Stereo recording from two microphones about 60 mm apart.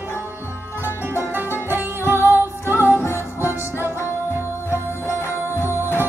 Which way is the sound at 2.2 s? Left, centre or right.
Left.